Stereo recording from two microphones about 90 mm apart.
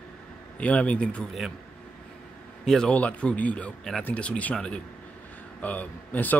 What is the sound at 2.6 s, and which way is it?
Speech, 5° left (ahead or behind).